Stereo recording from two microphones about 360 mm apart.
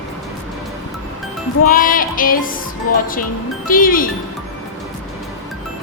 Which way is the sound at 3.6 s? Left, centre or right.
Left.